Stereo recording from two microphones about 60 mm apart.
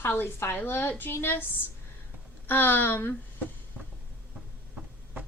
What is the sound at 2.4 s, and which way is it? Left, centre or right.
Speech, left.